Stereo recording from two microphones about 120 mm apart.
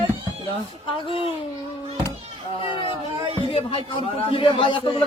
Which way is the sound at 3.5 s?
50° left (ahead or behind).